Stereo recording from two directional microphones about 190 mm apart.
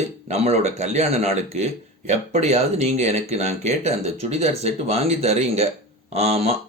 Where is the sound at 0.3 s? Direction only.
35° right (ahead or behind).